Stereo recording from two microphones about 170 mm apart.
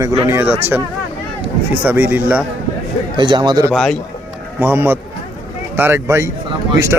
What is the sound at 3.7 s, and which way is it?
Speech, centre (ahead or behind).